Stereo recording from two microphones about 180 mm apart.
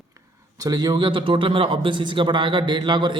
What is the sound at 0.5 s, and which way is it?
A man's voice, 20° right (ahead or behind).